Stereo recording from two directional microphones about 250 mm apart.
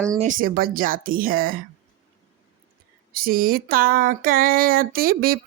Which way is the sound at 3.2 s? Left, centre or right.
Right.